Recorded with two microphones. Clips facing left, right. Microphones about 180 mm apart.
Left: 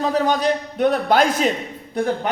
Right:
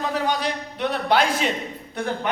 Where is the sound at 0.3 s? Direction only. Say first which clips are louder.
Left 6 dB; 45° left (ahead or behind).